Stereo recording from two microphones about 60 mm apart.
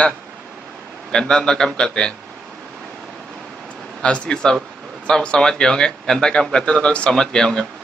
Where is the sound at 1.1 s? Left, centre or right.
Centre.